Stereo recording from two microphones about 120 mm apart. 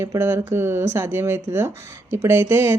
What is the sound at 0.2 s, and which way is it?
A woman's voice, 20° right (ahead or behind).